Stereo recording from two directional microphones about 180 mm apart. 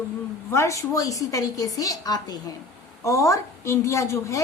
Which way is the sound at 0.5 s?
15° left (ahead or behind).